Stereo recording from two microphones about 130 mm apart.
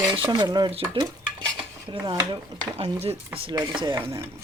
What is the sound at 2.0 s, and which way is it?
Speech, 30° right (ahead or behind).